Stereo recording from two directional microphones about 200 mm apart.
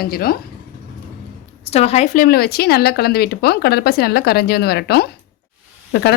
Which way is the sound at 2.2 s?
50° left (ahead or behind).